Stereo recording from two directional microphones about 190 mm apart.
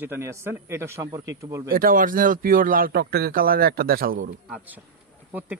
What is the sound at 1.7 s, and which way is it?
A man's voice, 50° right (ahead or behind).